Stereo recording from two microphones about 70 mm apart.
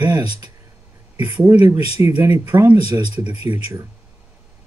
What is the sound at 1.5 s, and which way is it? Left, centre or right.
Speech, right.